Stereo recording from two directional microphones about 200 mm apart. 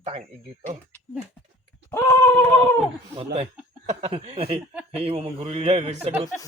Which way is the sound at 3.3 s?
30° right (ahead or behind).